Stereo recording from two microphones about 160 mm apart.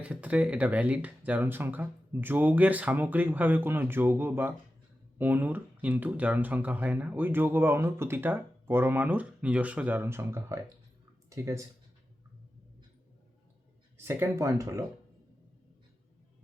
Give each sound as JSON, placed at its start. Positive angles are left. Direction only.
{"t": 0.0, "sound": "speech", "side_deg": -10}
{"t": 14.0, "sound": "speech", "side_deg": -15}